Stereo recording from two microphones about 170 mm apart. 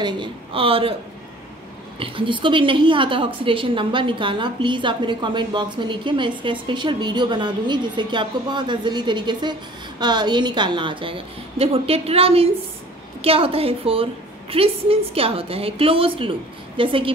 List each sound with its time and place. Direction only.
0.0 s a woman's voice: 30° right (ahead or behind)
2.0 s a woman's voice: 30° right (ahead or behind)